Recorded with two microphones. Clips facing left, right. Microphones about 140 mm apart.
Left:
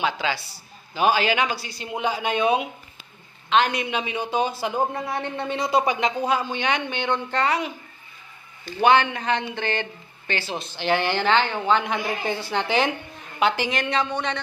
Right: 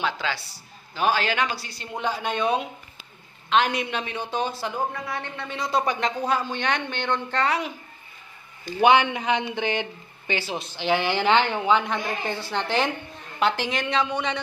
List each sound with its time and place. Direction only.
0.0 s a woman's voice: 10° left (ahead or behind)
4.7 s a woman's voice: 25° left (ahead or behind)
5.7 s a woman's voice: 10° left (ahead or behind)
8.8 s speech: 15° right (ahead or behind)
11.8 s a woman's voice: 10° left (ahead or behind)